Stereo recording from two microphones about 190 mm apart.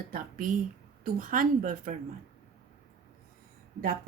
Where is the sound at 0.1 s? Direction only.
45° right (ahead or behind).